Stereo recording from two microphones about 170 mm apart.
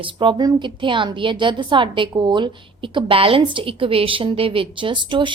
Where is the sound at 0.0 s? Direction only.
30° right (ahead or behind).